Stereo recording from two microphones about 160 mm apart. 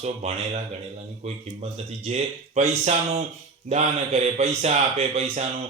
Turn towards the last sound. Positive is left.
turn(degrees=-45)  # may be behind; listen again after turning